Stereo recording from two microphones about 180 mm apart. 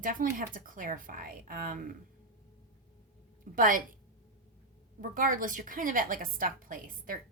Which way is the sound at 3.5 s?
50° right (ahead or behind).